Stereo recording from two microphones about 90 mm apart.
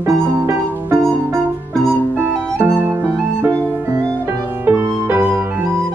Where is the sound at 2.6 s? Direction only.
20° right (ahead or behind).